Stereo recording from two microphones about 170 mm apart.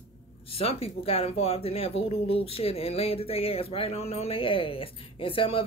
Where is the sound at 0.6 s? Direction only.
35° left (ahead or behind).